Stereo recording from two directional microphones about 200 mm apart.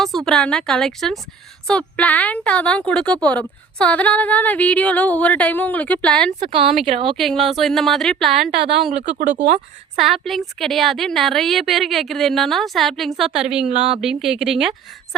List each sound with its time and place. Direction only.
0.0 s a woman's voice: centre (ahead or behind)
6.5 s speech: 25° right (ahead or behind)
7.2 s a woman's voice: centre (ahead or behind)
8.9 s speech: 40° right (ahead or behind)
10.0 s a woman's voice: centre (ahead or behind)
13.7 s speech: 30° right (ahead or behind)
14.0 s a woman's voice: centre (ahead or behind)